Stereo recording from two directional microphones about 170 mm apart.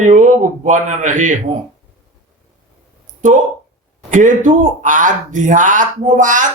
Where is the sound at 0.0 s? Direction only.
45° right (ahead or behind).